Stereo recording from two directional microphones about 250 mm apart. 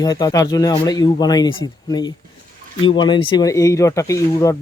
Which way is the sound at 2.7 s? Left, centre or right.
Centre.